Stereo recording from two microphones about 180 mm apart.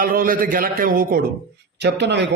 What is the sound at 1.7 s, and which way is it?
Speech, 75° right (ahead or behind).